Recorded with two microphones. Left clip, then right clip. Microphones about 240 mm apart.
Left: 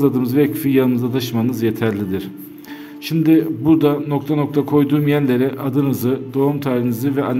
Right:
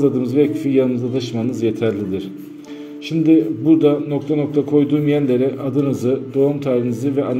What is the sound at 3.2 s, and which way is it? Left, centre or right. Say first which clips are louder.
A man's voice: right 1 dB; left.